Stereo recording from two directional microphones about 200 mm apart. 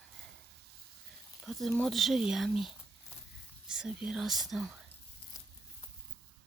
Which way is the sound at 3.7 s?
5° right (ahead or behind).